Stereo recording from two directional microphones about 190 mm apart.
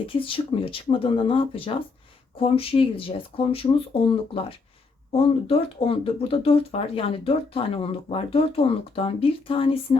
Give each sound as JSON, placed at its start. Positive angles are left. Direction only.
{"t": 0.1, "sound": "speech", "side_deg": 30}